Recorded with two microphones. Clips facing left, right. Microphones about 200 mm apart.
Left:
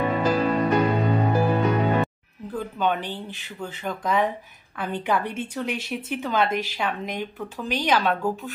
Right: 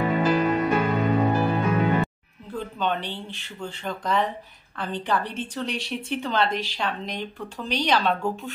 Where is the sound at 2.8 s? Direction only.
10° left (ahead or behind).